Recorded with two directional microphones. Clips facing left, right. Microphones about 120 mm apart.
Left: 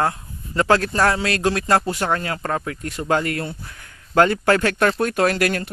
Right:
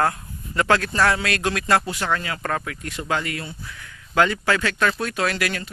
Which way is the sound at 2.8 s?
40° left (ahead or behind).